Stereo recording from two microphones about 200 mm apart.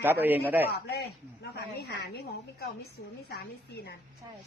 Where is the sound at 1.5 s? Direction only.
55° left (ahead or behind).